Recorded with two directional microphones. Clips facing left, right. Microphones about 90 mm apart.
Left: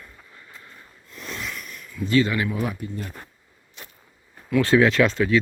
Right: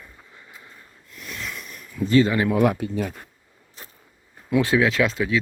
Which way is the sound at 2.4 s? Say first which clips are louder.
Right 8 dB; 65° right (ahead or behind).